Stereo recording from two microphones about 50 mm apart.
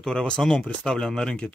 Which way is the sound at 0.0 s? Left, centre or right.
Centre.